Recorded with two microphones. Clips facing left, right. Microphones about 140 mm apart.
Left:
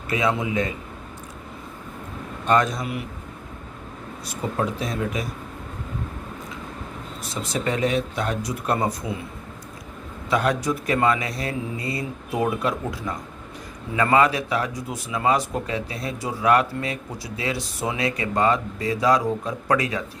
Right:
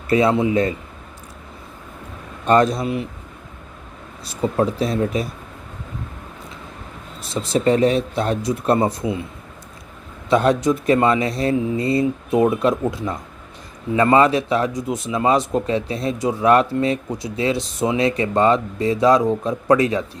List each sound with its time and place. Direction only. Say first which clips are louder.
0.1 s speech: right 7 dB; 35° right (ahead or behind)
2.5 s speech: right 5 dB; 35° right (ahead or behind)
4.3 s speech: right 6 dB; 30° right (ahead or behind)
7.2 s speech: right 7 dB; 30° right (ahead or behind)
10.2 s speech: right 6 dB; 25° right (ahead or behind)